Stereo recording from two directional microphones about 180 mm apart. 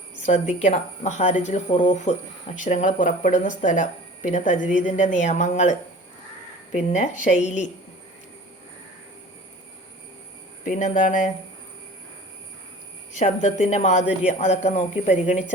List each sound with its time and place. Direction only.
0.3 s speech: 40° left (ahead or behind)
6.7 s speech: 45° left (ahead or behind)
10.7 s speech: 45° left (ahead or behind)
13.1 s speech: 40° left (ahead or behind)